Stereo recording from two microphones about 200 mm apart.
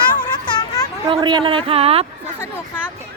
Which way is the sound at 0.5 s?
20° left (ahead or behind).